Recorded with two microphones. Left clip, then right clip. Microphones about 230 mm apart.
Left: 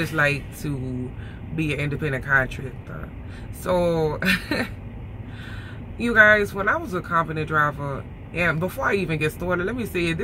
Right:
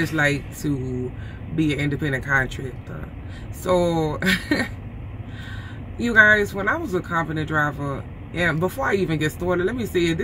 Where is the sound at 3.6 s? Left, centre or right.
Centre.